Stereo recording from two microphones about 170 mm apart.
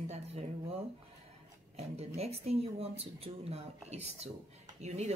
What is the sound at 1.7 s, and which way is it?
Speech, 35° right (ahead or behind).